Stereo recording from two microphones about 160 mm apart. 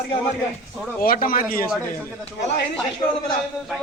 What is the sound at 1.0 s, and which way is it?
Speech, 65° left (ahead or behind).